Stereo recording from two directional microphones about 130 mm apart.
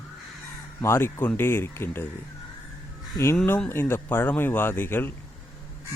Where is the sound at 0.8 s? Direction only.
20° left (ahead or behind).